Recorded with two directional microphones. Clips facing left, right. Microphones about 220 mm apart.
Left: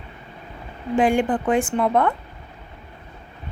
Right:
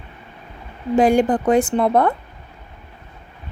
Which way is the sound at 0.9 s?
40° right (ahead or behind).